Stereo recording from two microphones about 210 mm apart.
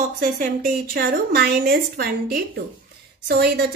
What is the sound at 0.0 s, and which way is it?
Speech, 35° right (ahead or behind).